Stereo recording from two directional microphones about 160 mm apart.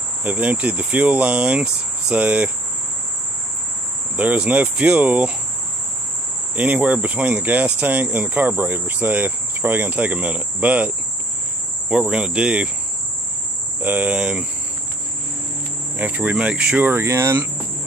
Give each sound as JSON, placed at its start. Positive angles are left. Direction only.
{"t": 0.2, "sound": "speech", "side_deg": -10}
{"t": 4.2, "sound": "speech", "side_deg": -10}
{"t": 6.5, "sound": "speech", "side_deg": -10}
{"t": 11.9, "sound": "speech", "side_deg": -5}
{"t": 13.8, "sound": "speech", "side_deg": -10}
{"t": 16.0, "sound": "speech", "side_deg": -10}